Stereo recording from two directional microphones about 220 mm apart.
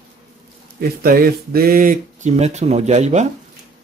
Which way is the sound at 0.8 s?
45° right (ahead or behind).